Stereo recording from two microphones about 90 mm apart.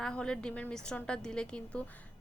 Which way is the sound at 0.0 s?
10° left (ahead or behind).